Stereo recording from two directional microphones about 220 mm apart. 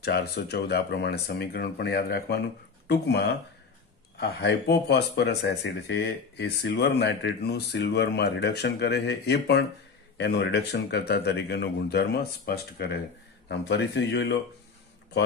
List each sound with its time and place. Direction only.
0.0 s speech: 45° left (ahead or behind)